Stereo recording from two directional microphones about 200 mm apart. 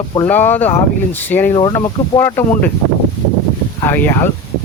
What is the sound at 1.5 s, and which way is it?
Speech, 20° left (ahead or behind).